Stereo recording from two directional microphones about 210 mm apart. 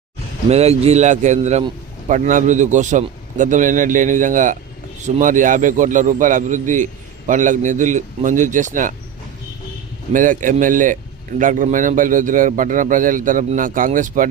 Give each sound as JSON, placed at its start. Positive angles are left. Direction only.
{"t": 0.5, "sound": "a man's voice", "side_deg": -30}
{"t": 10.1, "sound": "a man's voice", "side_deg": -40}